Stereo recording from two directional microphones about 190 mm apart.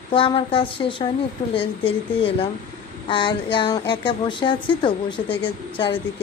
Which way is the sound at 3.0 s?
25° left (ahead or behind).